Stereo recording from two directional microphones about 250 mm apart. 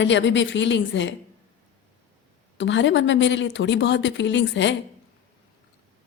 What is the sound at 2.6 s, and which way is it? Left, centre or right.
A woman's voice, left.